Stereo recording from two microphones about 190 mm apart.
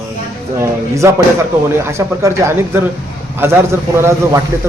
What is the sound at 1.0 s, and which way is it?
A man's voice, 15° right (ahead or behind).